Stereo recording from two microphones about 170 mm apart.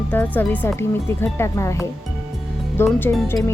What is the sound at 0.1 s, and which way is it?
Speech, 10° left (ahead or behind).